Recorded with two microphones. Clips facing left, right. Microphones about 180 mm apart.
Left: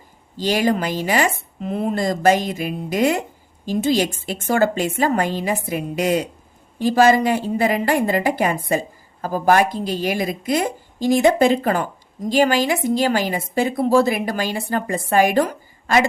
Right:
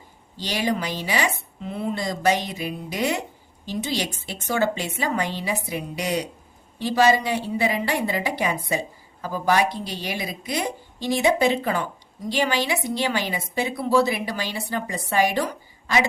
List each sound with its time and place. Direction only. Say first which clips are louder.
0.4 s speech: left 6 dB; 50° left (ahead or behind)